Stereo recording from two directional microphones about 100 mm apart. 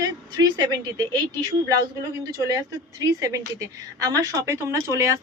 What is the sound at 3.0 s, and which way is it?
Speech, 35° right (ahead or behind).